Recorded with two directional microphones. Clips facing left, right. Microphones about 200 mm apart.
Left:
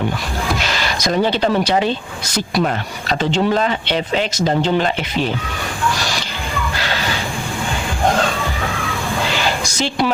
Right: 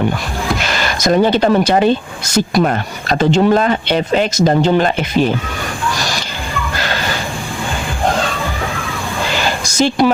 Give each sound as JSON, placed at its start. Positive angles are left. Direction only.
{"t": 0.6, "sound": "speech", "side_deg": -50}
{"t": 9.7, "sound": "speech", "side_deg": -45}